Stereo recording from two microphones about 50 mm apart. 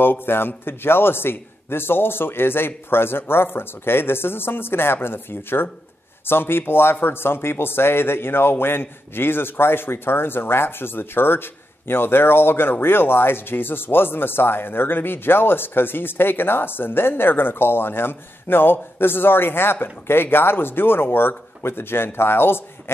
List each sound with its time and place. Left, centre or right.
0.0 s speech: left